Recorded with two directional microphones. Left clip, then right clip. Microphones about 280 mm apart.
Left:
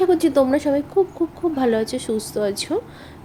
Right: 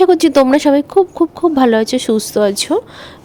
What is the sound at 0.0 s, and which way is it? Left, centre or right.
A woman's voice, right.